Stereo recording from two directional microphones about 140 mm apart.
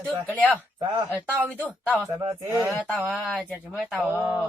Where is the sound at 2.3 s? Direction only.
20° right (ahead or behind).